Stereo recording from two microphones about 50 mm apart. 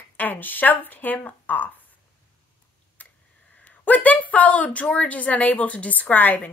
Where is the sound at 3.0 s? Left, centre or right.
Left.